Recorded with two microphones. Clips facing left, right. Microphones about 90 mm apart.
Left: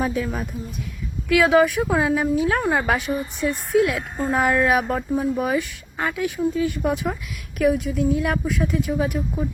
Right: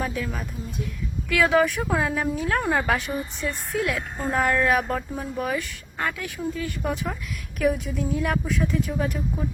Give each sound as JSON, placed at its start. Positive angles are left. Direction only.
{"t": 0.0, "sound": "speech", "side_deg": 20}
{"t": 1.3, "sound": "a woman's voice", "side_deg": 5}
{"t": 7.6, "sound": "a woman's voice", "side_deg": 0}